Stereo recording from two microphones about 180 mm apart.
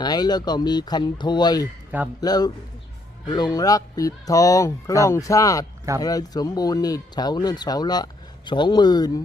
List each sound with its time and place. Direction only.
0.0 s speech: 20° left (ahead or behind)